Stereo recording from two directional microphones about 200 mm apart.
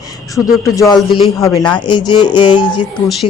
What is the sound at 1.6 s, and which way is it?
Speech, 25° left (ahead or behind).